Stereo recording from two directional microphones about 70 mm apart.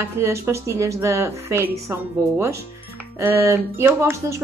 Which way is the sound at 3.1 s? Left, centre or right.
Right.